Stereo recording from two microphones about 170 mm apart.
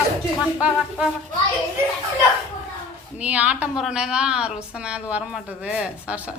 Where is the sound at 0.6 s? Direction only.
5° right (ahead or behind).